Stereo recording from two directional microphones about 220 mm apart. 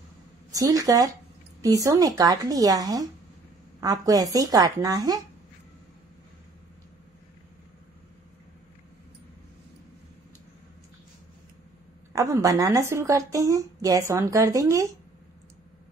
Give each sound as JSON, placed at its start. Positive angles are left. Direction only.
{"t": 0.6, "sound": "a woman's voice", "side_deg": -15}
{"t": 12.1, "sound": "a woman's voice", "side_deg": -15}